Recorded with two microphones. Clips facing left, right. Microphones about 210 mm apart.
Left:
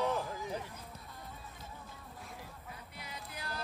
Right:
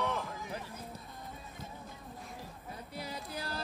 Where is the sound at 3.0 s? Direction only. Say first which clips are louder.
Right 7 dB; 35° right (ahead or behind).